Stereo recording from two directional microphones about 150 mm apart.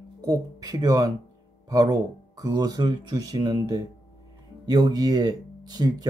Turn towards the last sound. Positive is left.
turn(degrees=-30)  # may be behind; listen again after turning